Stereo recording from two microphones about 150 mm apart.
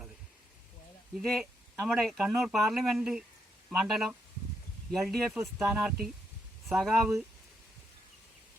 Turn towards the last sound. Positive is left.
turn(degrees=0)  # may be behind; listen again after turning